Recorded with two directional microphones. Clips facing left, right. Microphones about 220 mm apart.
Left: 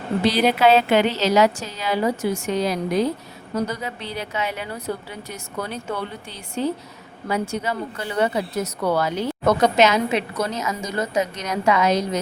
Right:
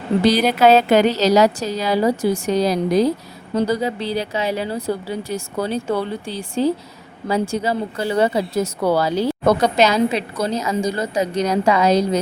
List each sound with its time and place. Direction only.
0.6 s a woman's voice: 40° right (ahead or behind)